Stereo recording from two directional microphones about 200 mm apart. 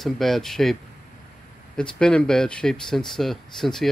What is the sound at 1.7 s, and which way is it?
Speech, 5° left (ahead or behind).